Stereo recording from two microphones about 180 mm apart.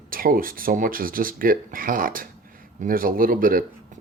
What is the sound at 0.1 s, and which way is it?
Speech, 50° right (ahead or behind).